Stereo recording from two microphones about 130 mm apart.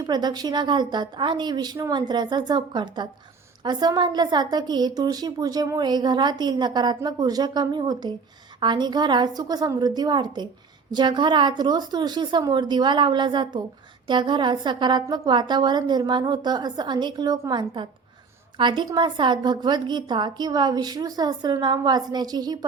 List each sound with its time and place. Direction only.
0.0 s a woman's voice: 35° right (ahead or behind)
18.5 s a woman's voice: 40° right (ahead or behind)